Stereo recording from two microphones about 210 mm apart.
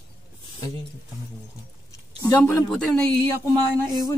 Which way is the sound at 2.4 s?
5° left (ahead or behind).